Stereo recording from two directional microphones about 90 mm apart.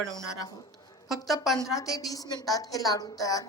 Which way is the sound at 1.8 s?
40° left (ahead or behind).